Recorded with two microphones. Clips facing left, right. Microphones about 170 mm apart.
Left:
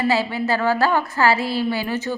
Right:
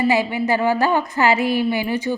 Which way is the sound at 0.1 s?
15° right (ahead or behind).